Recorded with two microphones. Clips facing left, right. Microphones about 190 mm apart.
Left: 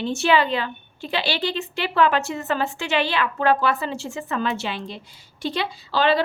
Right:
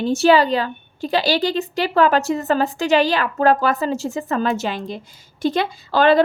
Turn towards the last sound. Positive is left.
turn(degrees=-50)  # may be behind; listen again after turning